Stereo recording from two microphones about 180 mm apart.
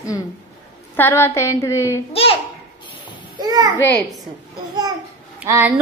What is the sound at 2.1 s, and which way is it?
Speech, 30° left (ahead or behind).